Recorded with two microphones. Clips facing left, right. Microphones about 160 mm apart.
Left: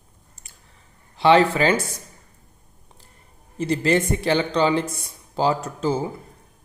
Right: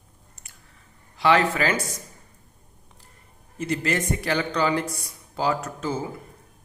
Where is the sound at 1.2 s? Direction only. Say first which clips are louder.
Left 4 dB; 30° left (ahead or behind).